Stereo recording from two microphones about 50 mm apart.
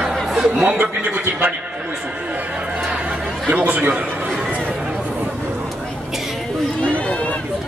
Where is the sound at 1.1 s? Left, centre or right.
Right.